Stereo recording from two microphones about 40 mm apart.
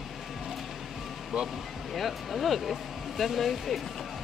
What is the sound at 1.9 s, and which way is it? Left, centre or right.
Speech, centre.